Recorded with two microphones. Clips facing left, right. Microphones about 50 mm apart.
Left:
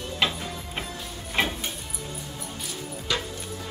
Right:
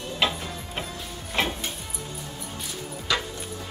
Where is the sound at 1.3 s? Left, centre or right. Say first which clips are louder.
Even; centre.